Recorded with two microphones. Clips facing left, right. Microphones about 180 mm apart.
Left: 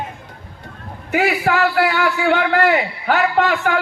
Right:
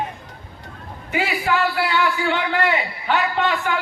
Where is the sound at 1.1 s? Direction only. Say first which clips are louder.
Left 4 dB; 65° left (ahead or behind).